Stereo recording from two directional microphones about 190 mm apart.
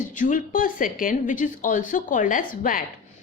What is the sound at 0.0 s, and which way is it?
A woman's voice, 45° left (ahead or behind).